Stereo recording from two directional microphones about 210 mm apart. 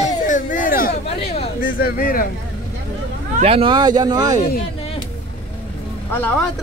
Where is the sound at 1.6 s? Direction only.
45° left (ahead or behind).